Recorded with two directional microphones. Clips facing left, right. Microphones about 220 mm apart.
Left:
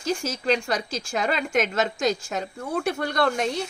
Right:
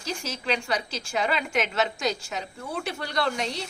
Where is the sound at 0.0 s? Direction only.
45° left (ahead or behind).